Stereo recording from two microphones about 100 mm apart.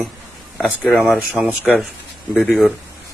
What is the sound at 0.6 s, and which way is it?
Speech, centre (ahead or behind).